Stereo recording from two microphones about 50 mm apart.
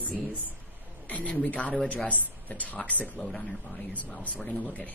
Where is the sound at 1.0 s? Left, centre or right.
Left.